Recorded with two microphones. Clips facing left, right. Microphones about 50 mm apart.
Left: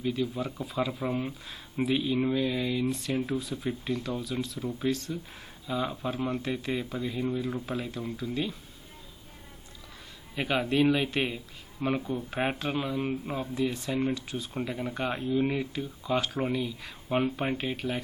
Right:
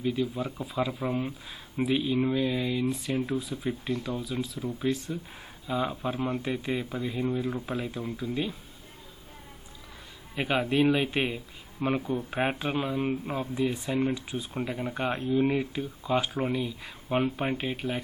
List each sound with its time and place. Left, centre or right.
0.0 s speech: centre
4.9 s speech: centre
10.4 s speech: centre